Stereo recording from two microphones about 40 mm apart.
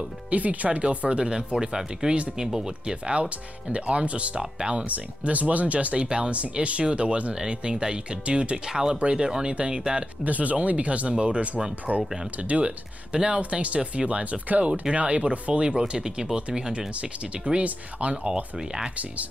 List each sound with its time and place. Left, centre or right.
0.3 s speech: right; by 3.2 s centre
3.2 s speech: right
4.4 s speech: right
4.8 s speech: right
8.6 s speech: centre
10.2 s speech: right
11.9 s speech: right
15.9 s speech: centre
17.0 s speech: right